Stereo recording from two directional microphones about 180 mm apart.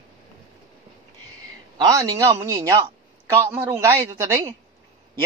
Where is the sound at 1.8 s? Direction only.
20° right (ahead or behind).